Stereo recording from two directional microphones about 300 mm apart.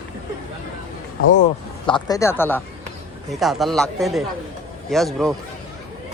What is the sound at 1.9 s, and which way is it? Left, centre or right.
Speech, centre.